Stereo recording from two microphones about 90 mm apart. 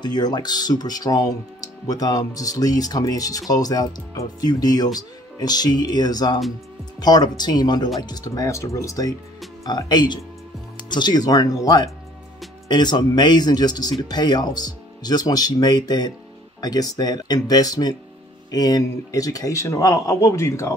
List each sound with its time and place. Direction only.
0.0 s a man's voice: 50° left (ahead or behind)
9.7 s a man's voice: 50° left (ahead or behind); by 20.7 s 35° left (ahead or behind)